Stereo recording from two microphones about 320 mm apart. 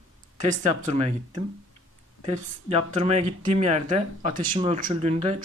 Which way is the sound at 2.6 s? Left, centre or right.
Centre.